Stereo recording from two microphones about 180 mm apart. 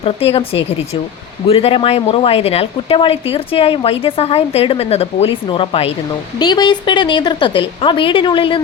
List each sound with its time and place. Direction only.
0.0 s a woman's voice: 35° left (ahead or behind)